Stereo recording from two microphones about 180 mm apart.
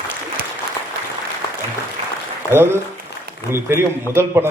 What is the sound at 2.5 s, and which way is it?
A man's voice, 10° right (ahead or behind).